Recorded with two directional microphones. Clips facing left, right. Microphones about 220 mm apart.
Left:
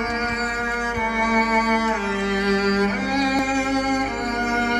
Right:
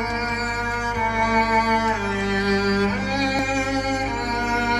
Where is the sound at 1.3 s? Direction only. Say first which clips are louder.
Left 1 dB; 55° left (ahead or behind).